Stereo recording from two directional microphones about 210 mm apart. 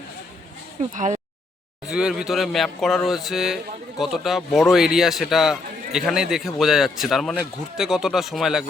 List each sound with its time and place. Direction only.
0.8 s speech: 35° right (ahead or behind)
1.9 s speech: 5° right (ahead or behind)